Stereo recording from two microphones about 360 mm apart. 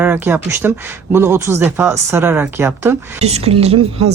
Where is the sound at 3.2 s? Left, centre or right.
Centre.